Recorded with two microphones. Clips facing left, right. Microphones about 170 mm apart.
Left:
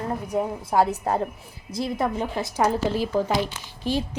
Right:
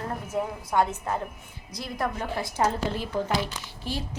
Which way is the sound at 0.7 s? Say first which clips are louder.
Left 4 dB; 35° left (ahead or behind).